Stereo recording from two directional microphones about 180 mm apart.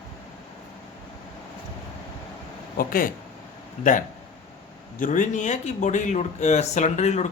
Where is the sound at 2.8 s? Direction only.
50° left (ahead or behind).